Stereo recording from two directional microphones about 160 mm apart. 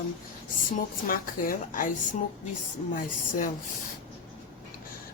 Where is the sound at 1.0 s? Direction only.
60° left (ahead or behind).